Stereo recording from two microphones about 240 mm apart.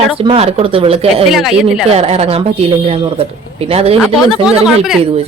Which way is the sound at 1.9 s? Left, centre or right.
Right.